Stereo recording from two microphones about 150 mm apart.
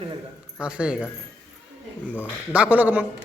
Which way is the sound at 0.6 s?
5° right (ahead or behind).